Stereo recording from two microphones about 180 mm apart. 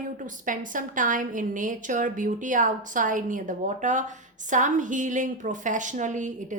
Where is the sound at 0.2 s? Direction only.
45° right (ahead or behind).